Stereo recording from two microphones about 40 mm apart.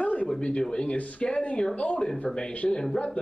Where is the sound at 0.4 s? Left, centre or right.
Left.